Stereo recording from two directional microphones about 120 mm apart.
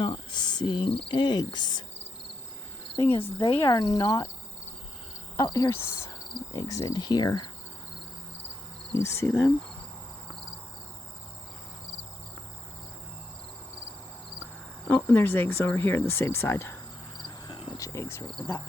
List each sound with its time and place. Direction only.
0.0 s speech: 40° left (ahead or behind)
3.0 s speech: 20° left (ahead or behind)
5.4 s speech: 30° left (ahead or behind)
9.0 s speech: 20° left (ahead or behind)
14.8 s speech: 15° left (ahead or behind)
17.7 s speech: 25° left (ahead or behind)